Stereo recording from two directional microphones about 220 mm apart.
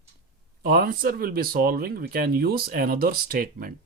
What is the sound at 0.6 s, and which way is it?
Speech, 40° right (ahead or behind).